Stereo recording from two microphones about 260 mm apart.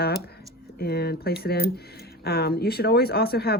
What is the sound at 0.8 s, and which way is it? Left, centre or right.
Speech, left.